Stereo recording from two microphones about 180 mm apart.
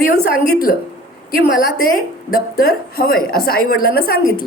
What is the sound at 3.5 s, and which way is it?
Speech, 55° left (ahead or behind).